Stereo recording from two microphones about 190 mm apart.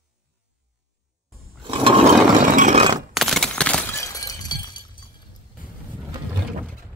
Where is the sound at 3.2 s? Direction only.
Centre (ahead or behind); by 4.6 s 20° left (ahead or behind).